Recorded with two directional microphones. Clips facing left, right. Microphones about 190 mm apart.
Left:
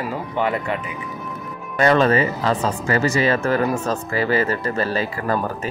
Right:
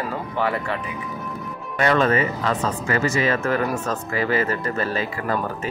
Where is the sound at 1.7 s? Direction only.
35° left (ahead or behind).